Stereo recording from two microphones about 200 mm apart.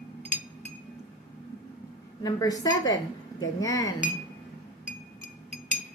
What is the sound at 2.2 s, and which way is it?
Speech, 20° left (ahead or behind).